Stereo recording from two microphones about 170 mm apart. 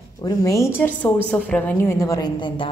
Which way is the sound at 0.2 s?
20° left (ahead or behind).